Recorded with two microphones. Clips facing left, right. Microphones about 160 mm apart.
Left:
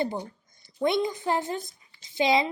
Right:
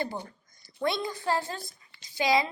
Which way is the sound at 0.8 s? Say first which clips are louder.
Left 5 dB; 20° left (ahead or behind).